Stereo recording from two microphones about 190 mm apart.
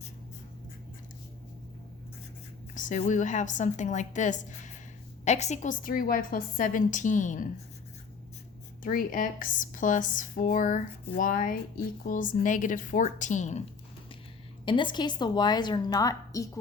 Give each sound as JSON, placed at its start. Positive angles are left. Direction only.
{"t": 2.7, "sound": "a woman's voice", "side_deg": 40}
{"t": 8.8, "sound": "speech", "side_deg": 45}
{"t": 14.6, "sound": "a woman's voice", "side_deg": 25}